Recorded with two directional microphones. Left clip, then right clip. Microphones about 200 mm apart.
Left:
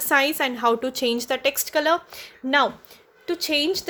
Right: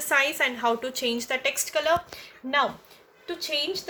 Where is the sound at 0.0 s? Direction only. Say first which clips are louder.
Left 3 dB; 55° left (ahead or behind).